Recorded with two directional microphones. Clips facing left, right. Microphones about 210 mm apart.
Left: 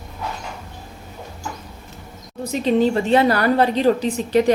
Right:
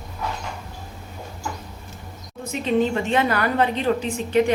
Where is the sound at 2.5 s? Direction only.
35° left (ahead or behind).